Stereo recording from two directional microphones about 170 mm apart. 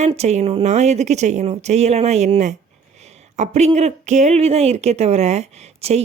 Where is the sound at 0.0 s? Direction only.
40° right (ahead or behind).